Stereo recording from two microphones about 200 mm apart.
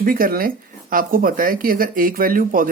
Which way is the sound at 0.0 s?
45° right (ahead or behind).